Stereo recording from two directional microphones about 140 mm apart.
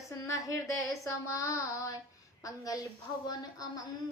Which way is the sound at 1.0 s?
20° left (ahead or behind).